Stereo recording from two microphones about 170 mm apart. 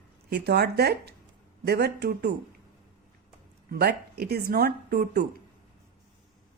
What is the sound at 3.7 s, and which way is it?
Speech, 65° right (ahead or behind).